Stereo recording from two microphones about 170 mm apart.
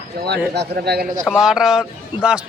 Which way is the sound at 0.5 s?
75° right (ahead or behind).